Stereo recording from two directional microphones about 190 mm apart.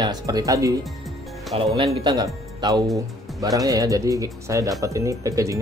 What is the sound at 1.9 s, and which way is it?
Speech, 20° right (ahead or behind).